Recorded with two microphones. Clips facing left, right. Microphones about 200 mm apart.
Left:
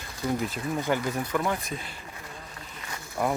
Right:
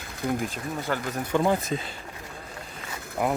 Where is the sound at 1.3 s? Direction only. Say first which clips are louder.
Right 9 dB; 30° right (ahead or behind).